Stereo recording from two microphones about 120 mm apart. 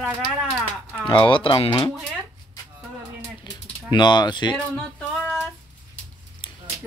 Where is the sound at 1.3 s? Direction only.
45° left (ahead or behind).